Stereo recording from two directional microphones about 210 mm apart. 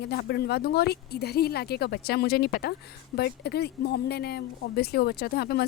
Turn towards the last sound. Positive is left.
turn(degrees=50)  # may be behind; listen again after turning